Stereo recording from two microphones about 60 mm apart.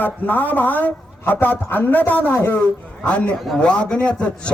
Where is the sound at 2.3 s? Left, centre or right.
Left.